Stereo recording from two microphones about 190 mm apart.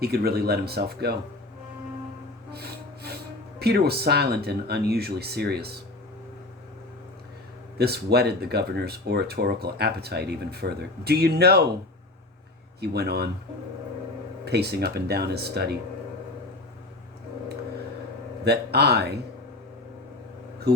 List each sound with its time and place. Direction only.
0.0 s speech: 55° right (ahead or behind)
2.5 s snort: 55° right (ahead or behind)
3.6 s speech: 55° right (ahead or behind)
7.8 s speech: 55° right (ahead or behind)
12.8 s speech: 60° right (ahead or behind)
14.4 s speech: 60° right (ahead or behind)
18.4 s speech: 60° right (ahead or behind)
20.7 s speech: 60° right (ahead or behind)